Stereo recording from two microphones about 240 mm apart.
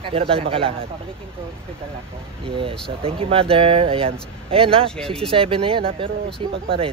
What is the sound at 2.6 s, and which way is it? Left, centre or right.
Speech, right.